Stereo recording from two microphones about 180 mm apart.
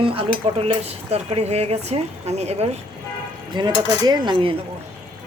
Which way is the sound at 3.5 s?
25° right (ahead or behind).